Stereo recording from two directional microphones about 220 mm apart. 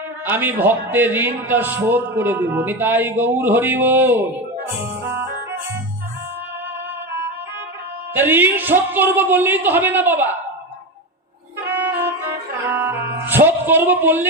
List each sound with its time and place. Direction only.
0.3 s a man's voice: 10° right (ahead or behind)
5.0 s music: 10° right (ahead or behind)
8.1 s a man's voice: 10° right (ahead or behind)
11.6 s music: 10° right (ahead or behind)
13.0 s music: 50° right (ahead or behind)
13.2 s speech: 10° right (ahead or behind)